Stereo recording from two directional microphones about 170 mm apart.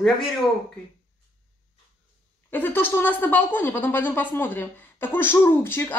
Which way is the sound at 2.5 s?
10° left (ahead or behind).